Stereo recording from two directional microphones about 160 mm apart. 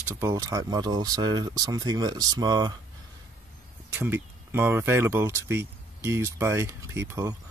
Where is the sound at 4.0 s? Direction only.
15° right (ahead or behind).